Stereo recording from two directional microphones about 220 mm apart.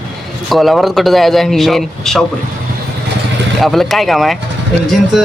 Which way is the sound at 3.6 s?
Centre (ahead or behind).